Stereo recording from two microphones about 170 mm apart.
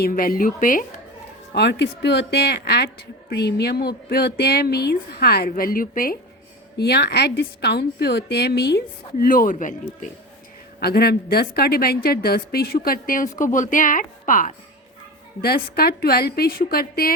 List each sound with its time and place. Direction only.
0.0 s a woman's voice: 60° left (ahead or behind)
1.5 s a woman's voice: 80° left; by 6.1 s 55° left (ahead or behind)
6.7 s a woman's voice: 75° left (ahead or behind)
9.2 s a woman's voice: 55° left (ahead or behind)
10.8 s a woman's voice: 65° left (ahead or behind); by 14.5 s 50° left (ahead or behind)
15.4 s a woman's voice: 65° left (ahead or behind)